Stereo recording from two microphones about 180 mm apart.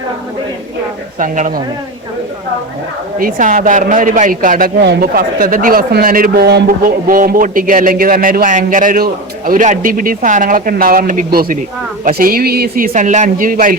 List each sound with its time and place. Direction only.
1.2 s a man's voice: 45° right (ahead or behind)
3.2 s a man's voice: 50° right (ahead or behind)